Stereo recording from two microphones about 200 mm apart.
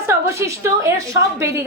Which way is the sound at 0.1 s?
15° right (ahead or behind).